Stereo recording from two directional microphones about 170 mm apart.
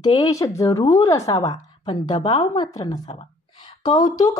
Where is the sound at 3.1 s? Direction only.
30° left (ahead or behind).